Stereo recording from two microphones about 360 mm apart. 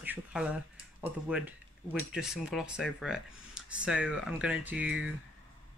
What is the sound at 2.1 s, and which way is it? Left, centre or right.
Speech, centre.